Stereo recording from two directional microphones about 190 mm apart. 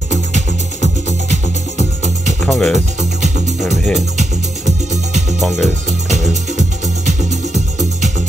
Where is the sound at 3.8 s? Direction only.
Centre (ahead or behind).